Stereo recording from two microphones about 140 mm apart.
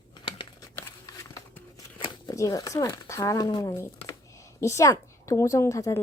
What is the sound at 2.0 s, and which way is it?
Speech, 25° left (ahead or behind).